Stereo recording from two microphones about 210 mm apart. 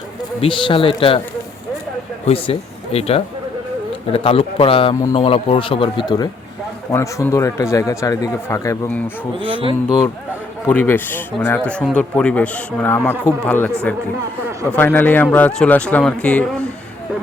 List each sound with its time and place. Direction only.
0.4 s speech: 25° left (ahead or behind)
2.2 s speech: 30° left (ahead or behind); by 9.0 s 10° left (ahead or behind)
10.7 s speech: 10° left (ahead or behind)